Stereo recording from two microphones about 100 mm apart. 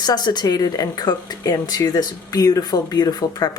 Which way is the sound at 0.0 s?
45° left (ahead or behind).